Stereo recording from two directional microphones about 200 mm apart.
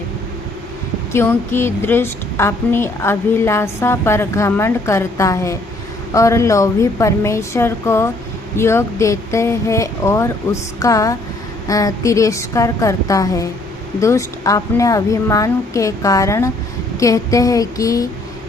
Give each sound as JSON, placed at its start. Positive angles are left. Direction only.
{"t": 1.1, "sound": "a woman's voice", "side_deg": 10}